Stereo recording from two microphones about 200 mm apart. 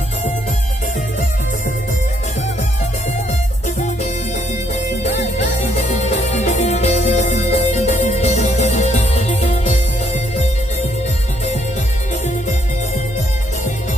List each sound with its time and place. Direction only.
3.6 s music: 35° left (ahead or behind)
5.6 s music: 35° left (ahead or behind)